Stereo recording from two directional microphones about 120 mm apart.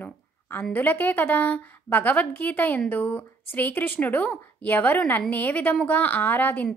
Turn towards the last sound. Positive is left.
turn(degrees=15)  # may be behind; listen again after turning